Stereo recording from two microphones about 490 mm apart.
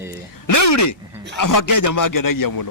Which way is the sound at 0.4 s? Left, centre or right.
Left.